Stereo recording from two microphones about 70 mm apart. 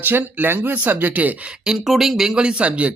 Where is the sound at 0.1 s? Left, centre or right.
Right.